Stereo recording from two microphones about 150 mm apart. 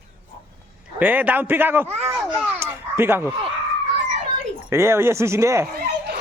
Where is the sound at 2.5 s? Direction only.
15° right (ahead or behind).